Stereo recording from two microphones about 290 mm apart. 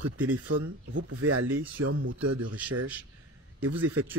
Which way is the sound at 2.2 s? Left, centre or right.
Right.